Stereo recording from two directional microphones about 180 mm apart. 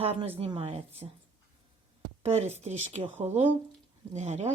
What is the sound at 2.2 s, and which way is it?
Speech, 35° right (ahead or behind).